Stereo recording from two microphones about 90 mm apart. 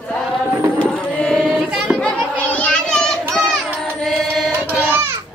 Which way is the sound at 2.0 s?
15° left (ahead or behind).